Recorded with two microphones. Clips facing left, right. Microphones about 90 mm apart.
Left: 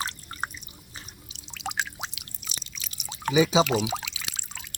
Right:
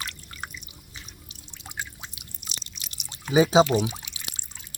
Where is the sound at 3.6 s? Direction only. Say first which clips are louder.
Right 2 dB; 90° left.